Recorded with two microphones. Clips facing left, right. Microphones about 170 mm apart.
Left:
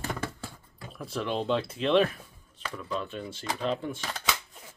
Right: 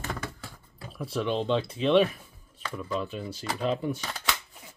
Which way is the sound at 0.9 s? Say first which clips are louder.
Right 3 dB; centre (ahead or behind).